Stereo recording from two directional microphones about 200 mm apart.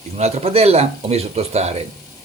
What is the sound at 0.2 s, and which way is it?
A man's voice, 30° right (ahead or behind).